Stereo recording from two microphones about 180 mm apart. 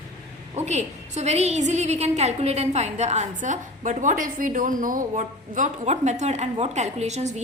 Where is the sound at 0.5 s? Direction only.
40° right (ahead or behind).